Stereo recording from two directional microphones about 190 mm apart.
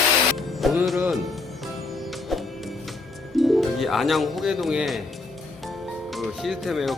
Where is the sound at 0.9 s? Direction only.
5° right (ahead or behind).